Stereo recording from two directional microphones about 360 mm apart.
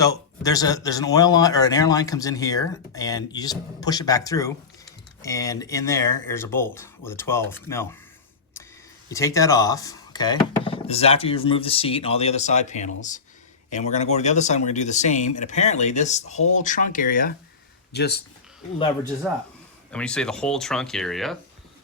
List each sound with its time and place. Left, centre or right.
0.0 s speech: centre
9.0 s speech: centre; by 18.2 s left
19.3 s speech: centre